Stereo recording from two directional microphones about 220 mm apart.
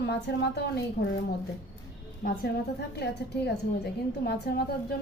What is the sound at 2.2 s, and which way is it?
A woman's voice, 40° left (ahead or behind).